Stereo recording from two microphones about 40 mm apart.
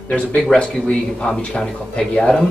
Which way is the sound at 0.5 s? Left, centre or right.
Left.